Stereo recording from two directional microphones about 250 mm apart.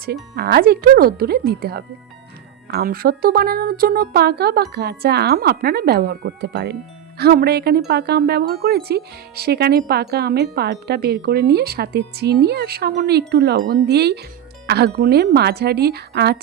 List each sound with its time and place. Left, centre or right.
0.0 s speech: right